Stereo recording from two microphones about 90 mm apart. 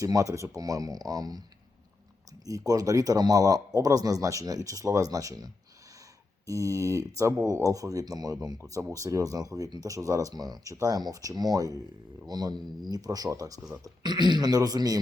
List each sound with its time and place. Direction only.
0.0 s speech: 40° right (ahead or behind)
2.5 s speech: 40° right (ahead or behind)